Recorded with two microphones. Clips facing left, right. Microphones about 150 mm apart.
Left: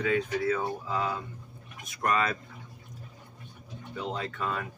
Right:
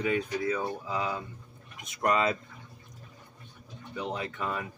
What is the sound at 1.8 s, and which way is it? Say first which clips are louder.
Speech: right 1 dB; 20° right (ahead or behind).